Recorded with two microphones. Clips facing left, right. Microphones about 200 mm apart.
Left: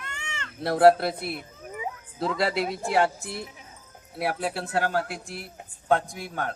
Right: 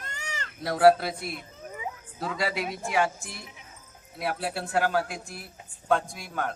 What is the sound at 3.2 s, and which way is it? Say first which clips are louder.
Speech: left 7 dB; 60° left (ahead or behind).